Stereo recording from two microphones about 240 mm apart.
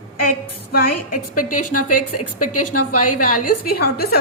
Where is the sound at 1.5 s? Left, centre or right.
Left.